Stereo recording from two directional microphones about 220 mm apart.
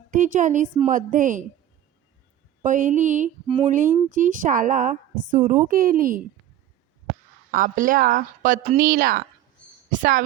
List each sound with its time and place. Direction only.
0.1 s speech: 35° right (ahead or behind)
2.6 s speech: 35° right (ahead or behind)
3.7 s speech: 35° right (ahead or behind)
7.5 s speech: 40° right (ahead or behind)